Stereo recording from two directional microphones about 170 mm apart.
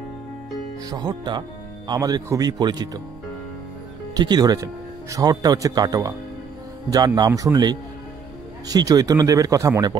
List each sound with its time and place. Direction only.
0.8 s speech: 25° right (ahead or behind)
4.1 s speech: 25° right (ahead or behind)
7.2 s speech: 20° right (ahead or behind)